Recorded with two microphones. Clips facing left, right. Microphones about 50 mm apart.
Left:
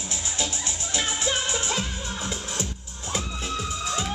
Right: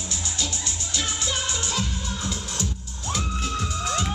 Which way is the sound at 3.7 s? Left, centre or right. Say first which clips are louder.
Right 2 dB; right.